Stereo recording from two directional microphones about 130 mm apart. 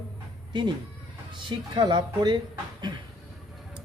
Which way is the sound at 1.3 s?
40° right (ahead or behind).